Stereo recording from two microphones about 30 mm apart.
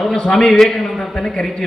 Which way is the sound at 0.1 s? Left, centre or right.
Left.